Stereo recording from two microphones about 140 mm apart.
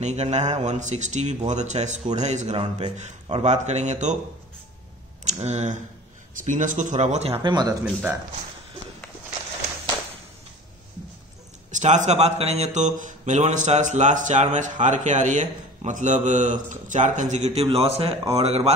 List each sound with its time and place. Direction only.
0.0 s a man's voice: 55° right (ahead or behind)
5.2 s a man's voice: 55° right (ahead or behind); by 7.7 s 30° right (ahead or behind)
7.8 s speech: 10° right (ahead or behind)
11.7 s a man's voice: 60° right (ahead or behind)